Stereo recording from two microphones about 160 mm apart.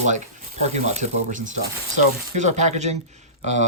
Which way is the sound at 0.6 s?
45° right (ahead or behind).